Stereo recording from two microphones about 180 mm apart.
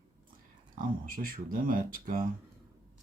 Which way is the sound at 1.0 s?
50° right (ahead or behind).